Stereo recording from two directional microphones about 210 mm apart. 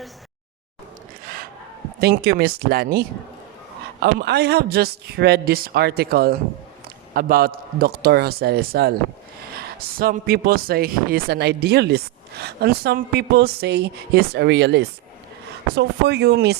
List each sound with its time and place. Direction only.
2.0 s a man's voice: 50° right (ahead or behind)